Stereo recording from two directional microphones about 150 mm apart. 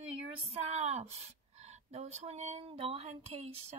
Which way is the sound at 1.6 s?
45° right (ahead or behind).